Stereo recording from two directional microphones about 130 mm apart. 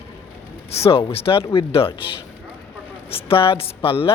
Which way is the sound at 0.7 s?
50° left (ahead or behind).